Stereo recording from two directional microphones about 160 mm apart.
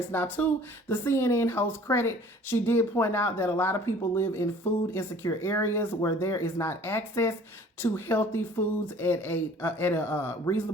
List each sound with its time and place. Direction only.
0.1 s speech: 10° left (ahead or behind)